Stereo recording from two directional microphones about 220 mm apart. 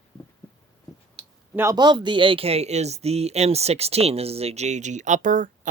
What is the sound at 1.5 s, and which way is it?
Speech, 15° right (ahead or behind).